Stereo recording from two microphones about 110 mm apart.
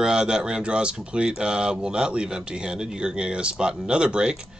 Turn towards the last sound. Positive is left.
turn(degrees=-10)  # may be behind; listen again after turning